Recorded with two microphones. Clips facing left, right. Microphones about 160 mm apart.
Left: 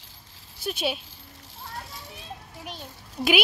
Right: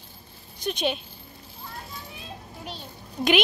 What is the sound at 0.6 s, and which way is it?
Speech, 5° left (ahead or behind).